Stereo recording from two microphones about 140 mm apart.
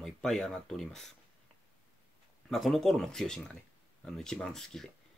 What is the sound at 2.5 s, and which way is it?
Speech, centre (ahead or behind).